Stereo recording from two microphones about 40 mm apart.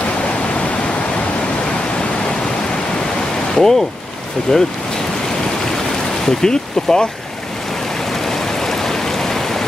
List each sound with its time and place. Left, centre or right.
3.5 s speech: centre
6.2 s speech: centre
8.3 s stream: centre